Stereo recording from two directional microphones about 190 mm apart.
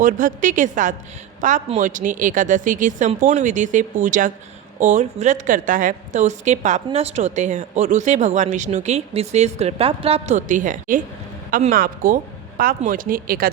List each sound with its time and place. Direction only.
0.0 s a woman's voice: 45° right (ahead or behind)